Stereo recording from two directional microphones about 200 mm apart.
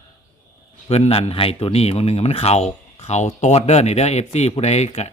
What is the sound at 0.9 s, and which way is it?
Speech, 30° left (ahead or behind).